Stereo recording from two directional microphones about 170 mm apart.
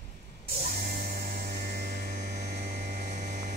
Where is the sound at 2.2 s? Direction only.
75° right (ahead or behind).